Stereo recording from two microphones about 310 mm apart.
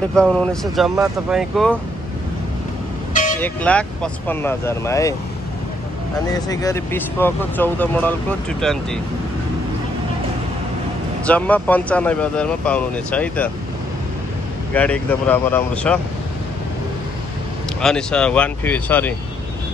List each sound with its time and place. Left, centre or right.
0.1 s speech: centre
3.1 s vehicle: left
3.3 s speech: centre
6.5 s speech: centre
11.2 s speech: centre
14.7 s speech: centre
17.8 s speech: centre